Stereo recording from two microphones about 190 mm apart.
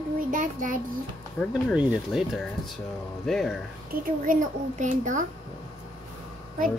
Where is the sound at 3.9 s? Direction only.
50° right (ahead or behind).